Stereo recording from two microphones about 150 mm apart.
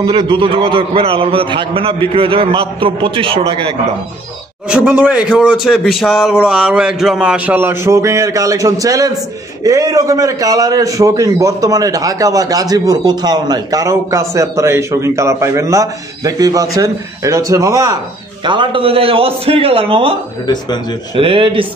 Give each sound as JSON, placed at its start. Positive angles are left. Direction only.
{"t": 0.0, "sound": "a man's voice", "side_deg": -35}
{"t": 4.6, "sound": "speech", "side_deg": -10}
{"t": 5.9, "sound": "a sound", "side_deg": 0}
{"t": 6.4, "sound": "a man's voice", "side_deg": -5}
{"t": 18.4, "sound": "a man's voice", "side_deg": -30}
{"t": 21.2, "sound": "a man's voice", "side_deg": -35}